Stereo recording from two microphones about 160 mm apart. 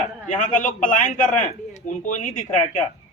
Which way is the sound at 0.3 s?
55° left (ahead or behind).